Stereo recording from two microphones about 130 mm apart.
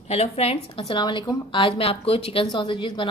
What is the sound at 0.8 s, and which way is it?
A woman's voice, 35° left (ahead or behind).